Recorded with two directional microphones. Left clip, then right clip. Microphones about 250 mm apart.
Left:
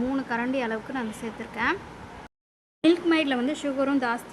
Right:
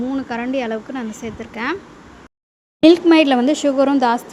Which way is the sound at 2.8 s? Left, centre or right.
Right.